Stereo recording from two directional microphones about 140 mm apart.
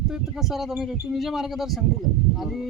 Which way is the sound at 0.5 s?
Centre (ahead or behind).